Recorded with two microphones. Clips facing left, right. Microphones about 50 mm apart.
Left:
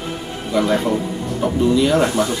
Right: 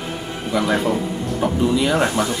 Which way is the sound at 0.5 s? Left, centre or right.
Centre.